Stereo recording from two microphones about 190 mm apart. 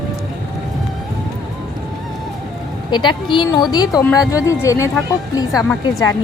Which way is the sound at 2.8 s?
25° left (ahead or behind).